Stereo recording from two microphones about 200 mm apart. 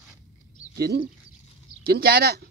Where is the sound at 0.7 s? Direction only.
50° right (ahead or behind).